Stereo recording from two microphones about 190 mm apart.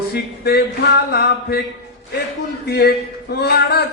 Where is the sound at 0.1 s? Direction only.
55° left (ahead or behind).